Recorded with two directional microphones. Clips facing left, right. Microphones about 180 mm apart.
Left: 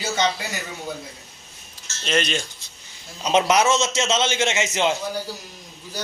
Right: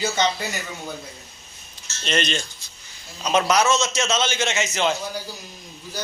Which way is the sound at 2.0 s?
5° left (ahead or behind).